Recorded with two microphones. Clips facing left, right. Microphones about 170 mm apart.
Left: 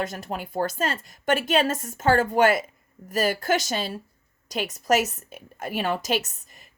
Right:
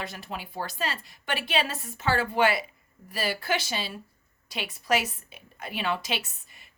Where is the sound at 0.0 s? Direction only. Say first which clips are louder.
Left 7 dB; 45° left (ahead or behind).